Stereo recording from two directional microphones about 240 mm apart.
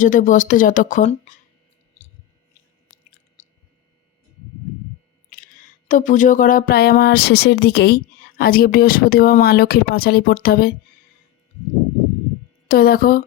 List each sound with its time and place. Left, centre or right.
0.0 s speech: left
3.4 s a sound: left
5.9 s speech: left
12.6 s speech: left